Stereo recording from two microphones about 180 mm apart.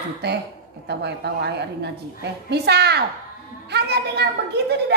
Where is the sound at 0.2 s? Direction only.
65° right (ahead or behind).